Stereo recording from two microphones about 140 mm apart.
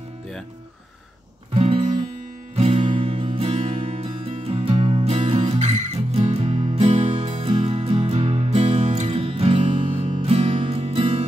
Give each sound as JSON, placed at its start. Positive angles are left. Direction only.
{"t": 1.6, "sound": "music", "side_deg": -50}